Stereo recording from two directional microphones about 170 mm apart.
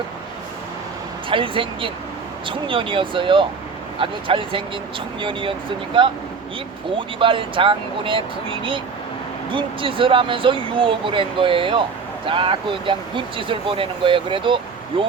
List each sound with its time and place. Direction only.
1.3 s speech: 30° right (ahead or behind)